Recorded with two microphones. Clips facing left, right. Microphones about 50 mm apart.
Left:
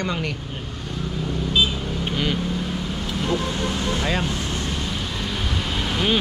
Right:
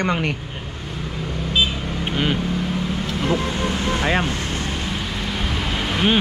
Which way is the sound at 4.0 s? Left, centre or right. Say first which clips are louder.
Right 6 dB; right.